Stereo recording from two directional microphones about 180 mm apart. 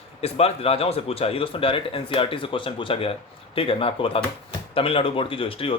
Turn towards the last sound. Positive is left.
turn(degrees=30)  # may be behind; listen again after turning